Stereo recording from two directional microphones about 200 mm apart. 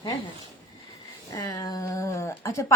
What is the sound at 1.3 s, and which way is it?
Speech, 20° left (ahead or behind).